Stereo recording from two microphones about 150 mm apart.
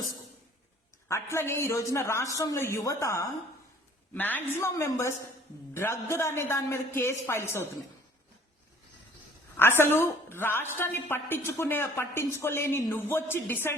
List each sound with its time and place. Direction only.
1.0 s a man's voice: 20° left (ahead or behind)
9.6 s a woman's voice: 15° left (ahead or behind)